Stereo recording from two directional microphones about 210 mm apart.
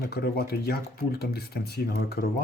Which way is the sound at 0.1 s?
45° left (ahead or behind).